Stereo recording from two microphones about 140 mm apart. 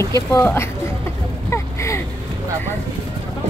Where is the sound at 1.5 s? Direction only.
20° left (ahead or behind).